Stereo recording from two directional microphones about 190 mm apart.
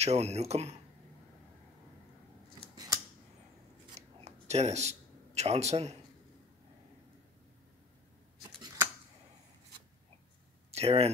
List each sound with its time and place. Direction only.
0.0 s speech: 35° right (ahead or behind)
2.7 s scissors: 20° right (ahead or behind)
3.9 s a sound: 35° right (ahead or behind)
10.7 s speech: 35° right (ahead or behind)